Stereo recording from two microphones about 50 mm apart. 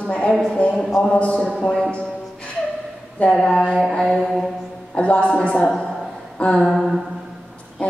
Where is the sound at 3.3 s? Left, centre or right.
Centre.